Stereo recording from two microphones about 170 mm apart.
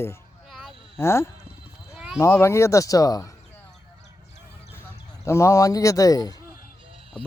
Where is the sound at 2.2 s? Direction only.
15° left (ahead or behind).